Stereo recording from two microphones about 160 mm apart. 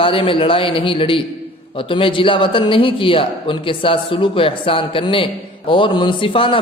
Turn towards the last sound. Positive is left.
turn(degrees=35)  # may be behind; listen again after turning